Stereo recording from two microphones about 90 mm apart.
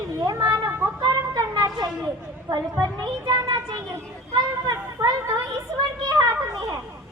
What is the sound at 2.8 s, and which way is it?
Speech, 55° right (ahead or behind).